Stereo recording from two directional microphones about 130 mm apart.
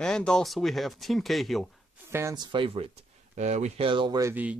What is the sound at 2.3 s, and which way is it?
Speech, 35° right (ahead or behind).